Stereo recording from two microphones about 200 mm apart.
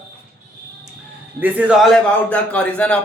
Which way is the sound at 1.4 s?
5° right (ahead or behind).